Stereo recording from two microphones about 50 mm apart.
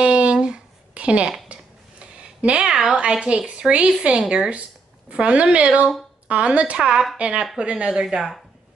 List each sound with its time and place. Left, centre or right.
0.0 s a sound: right
3.0 s a woman's voice: centre
6.8 s a woman's voice: centre